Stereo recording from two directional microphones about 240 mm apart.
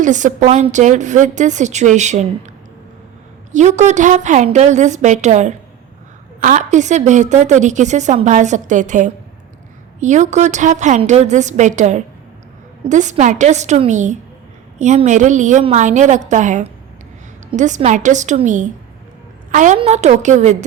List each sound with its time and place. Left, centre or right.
0.0 s a woman's voice: right
3.5 s a woman's voice: right